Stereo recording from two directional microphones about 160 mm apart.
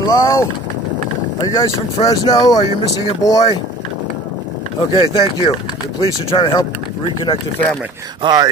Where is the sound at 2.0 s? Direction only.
25° left (ahead or behind).